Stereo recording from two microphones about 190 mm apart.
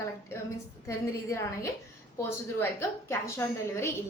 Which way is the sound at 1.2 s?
15° left (ahead or behind).